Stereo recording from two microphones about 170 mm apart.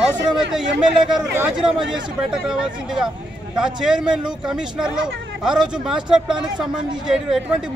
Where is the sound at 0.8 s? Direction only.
5° right (ahead or behind).